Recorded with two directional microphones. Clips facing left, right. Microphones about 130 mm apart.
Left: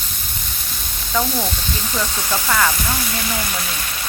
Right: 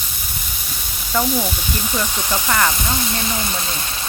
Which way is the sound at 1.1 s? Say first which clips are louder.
Right 1 dB; 10° right (ahead or behind).